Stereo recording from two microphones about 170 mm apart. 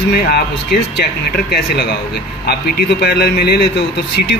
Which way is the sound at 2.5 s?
70° left (ahead or behind).